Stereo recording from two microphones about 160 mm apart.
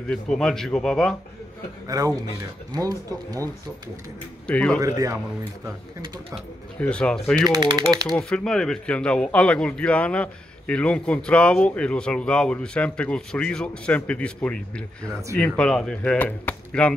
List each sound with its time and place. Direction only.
0.1 s speech: 5° left (ahead or behind)
1.9 s speech: 20° right (ahead or behind)
4.5 s speech: 5° left (ahead or behind)
4.7 s speech: 20° right (ahead or behind)
6.8 s speech: 5° left (ahead or behind)
7.4 s speech: 25° right (ahead or behind)
8.1 s speech: 5° left (ahead or behind)